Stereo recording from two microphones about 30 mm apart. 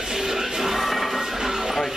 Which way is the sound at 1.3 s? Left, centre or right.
Centre.